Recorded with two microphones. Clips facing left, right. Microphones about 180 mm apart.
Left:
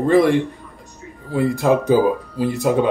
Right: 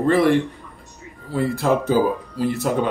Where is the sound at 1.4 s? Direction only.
15° left (ahead or behind).